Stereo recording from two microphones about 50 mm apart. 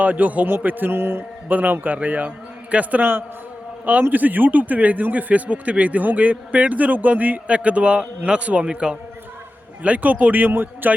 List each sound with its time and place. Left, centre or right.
0.0 s a man's voice: right
0.9 s a man's voice: right
1.5 s a man's voice: right
3.0 s a man's voice: right
4.1 s a man's voice: right